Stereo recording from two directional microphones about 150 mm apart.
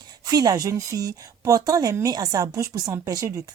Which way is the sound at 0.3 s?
25° right (ahead or behind).